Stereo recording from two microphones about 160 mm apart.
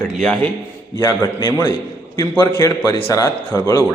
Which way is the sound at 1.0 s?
15° left (ahead or behind).